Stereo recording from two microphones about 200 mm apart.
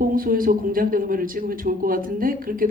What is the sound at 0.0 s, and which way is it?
A man's voice, 45° right (ahead or behind).